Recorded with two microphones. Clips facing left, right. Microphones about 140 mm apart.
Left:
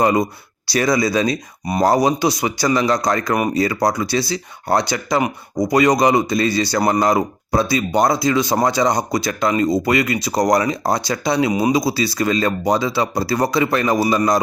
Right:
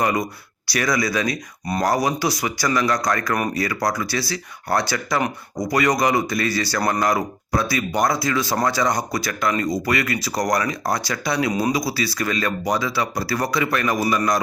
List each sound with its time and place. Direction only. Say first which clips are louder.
0.0 s speech: left 5 dB; 25° left (ahead or behind)